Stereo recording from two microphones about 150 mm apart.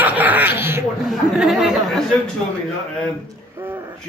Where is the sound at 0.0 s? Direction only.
10° right (ahead or behind).